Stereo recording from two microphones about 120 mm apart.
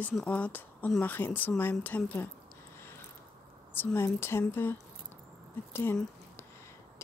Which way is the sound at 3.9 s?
20° left (ahead or behind).